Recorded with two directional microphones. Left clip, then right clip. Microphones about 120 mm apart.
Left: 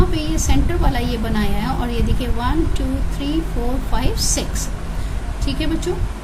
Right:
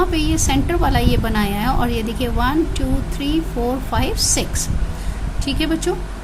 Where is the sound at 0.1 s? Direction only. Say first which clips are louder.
Right 3 dB; 45° right (ahead or behind).